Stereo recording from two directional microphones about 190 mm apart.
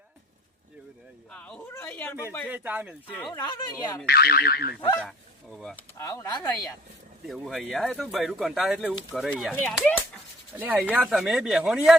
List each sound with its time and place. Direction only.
1.3 s speech: 5° left (ahead or behind)
2.5 s speech: 10° right (ahead or behind)
3.3 s speech: 20° left (ahead or behind)
4.0 s speech: 55° left (ahead or behind)
4.9 s speech: 5° left (ahead or behind)
6.0 s speech: 20° left (ahead or behind)
7.3 s speech: centre (ahead or behind)
10.5 s speech: 10° right (ahead or behind)